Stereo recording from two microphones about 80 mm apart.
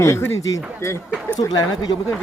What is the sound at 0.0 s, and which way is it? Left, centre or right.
Speech, left.